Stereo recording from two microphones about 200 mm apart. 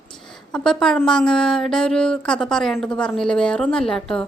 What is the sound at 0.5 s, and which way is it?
A woman's voice, 5° left (ahead or behind).